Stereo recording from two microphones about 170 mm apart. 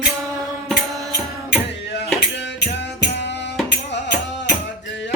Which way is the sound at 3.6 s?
90° left.